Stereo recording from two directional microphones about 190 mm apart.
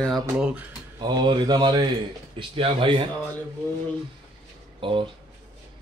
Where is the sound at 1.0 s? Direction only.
20° right (ahead or behind).